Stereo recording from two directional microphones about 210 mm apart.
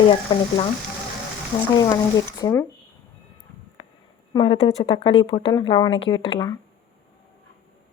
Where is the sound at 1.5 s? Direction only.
25° left (ahead or behind).